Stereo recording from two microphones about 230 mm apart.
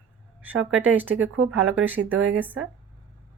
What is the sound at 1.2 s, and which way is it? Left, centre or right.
A woman's voice, right.